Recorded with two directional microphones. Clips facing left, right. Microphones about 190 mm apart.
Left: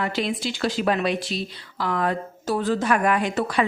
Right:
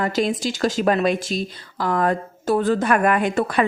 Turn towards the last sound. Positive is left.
turn(degrees=-55)  # may be behind; listen again after turning